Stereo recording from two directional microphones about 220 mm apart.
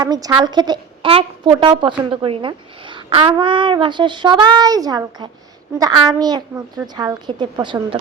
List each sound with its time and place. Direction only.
0.0 s a woman's voice: 15° right (ahead or behind)